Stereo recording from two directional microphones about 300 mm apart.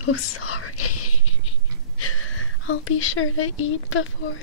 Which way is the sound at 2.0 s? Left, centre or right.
Left.